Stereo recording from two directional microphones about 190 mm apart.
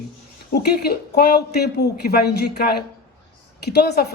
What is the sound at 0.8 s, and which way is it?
A man's voice, 55° left (ahead or behind).